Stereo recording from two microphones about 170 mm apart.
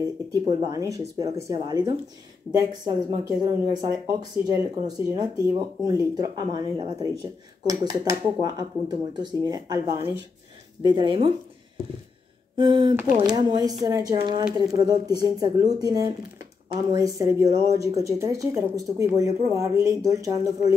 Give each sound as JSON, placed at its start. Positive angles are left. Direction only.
{"t": 0.5, "sound": "speech", "side_deg": -20}
{"t": 12.5, "sound": "speech", "side_deg": -25}